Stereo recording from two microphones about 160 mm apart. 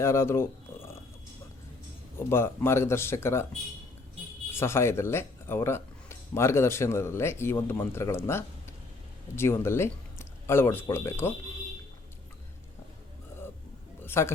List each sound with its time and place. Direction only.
0.0 s speech: 15° left (ahead or behind)
2.1 s speech: 15° left (ahead or behind)
4.5 s speech: 15° left (ahead or behind)
14.0 s a sound: 15° left (ahead or behind)